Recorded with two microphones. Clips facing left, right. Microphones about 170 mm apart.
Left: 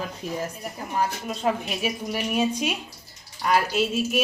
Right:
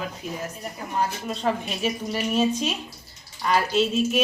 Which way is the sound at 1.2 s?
5° left (ahead or behind).